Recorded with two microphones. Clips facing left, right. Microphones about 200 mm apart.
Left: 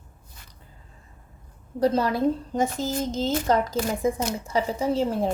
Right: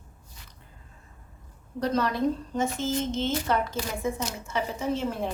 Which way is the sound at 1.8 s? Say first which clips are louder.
Left 4 dB; 30° left (ahead or behind).